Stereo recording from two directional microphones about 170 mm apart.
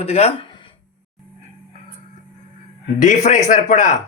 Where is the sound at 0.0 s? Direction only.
35° left (ahead or behind).